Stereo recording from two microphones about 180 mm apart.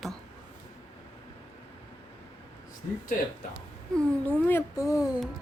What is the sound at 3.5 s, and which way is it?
Speech, 5° left (ahead or behind).